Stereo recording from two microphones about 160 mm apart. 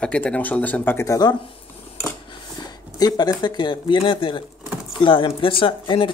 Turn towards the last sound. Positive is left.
turn(degrees=30)  # may be behind; listen again after turning